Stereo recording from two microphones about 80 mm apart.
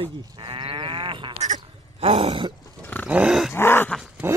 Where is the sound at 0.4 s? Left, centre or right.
Right.